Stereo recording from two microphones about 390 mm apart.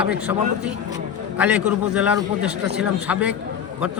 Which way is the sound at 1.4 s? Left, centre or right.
Centre.